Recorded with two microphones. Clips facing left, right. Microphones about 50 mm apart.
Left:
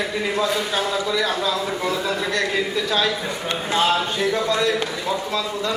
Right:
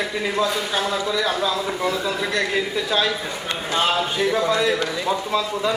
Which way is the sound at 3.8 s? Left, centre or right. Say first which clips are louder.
Even; centre.